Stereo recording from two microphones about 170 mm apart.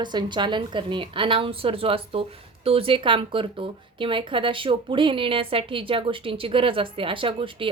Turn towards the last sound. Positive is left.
turn(degrees=-30)  # may be behind; listen again after turning